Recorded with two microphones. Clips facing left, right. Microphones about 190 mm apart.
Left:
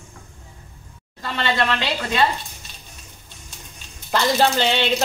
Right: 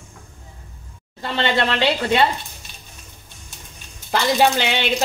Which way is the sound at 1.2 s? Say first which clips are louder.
Right 2 dB; 25° right (ahead or behind).